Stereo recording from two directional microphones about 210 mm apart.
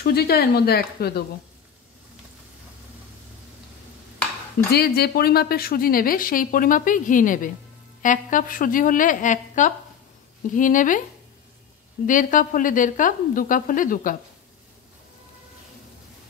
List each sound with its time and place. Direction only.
0.0 s a woman's voice: 50° left (ahead or behind)
4.7 s a woman's voice: 50° left (ahead or behind)
12.1 s a woman's voice: 40° left (ahead or behind)